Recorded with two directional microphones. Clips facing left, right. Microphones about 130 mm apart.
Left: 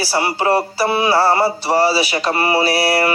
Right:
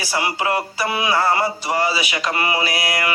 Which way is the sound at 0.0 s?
35° left (ahead or behind).